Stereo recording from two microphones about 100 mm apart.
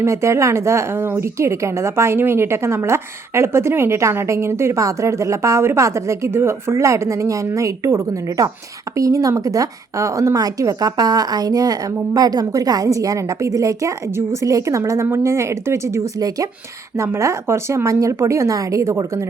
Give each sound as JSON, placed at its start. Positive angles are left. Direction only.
{"t": 0.0, "sound": "a woman's voice", "side_deg": -30}